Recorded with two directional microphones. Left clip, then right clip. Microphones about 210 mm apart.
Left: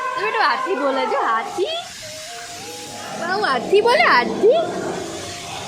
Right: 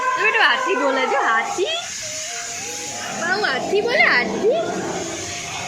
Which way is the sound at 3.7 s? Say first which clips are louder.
Left 3 dB; 50° left (ahead or behind).